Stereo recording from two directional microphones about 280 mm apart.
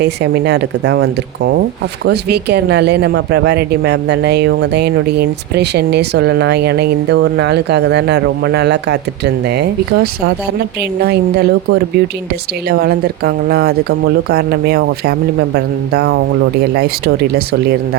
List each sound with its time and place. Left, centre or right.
0.0 s speech: right